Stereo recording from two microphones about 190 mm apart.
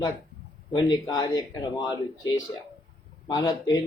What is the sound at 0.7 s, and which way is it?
Speech, 25° left (ahead or behind).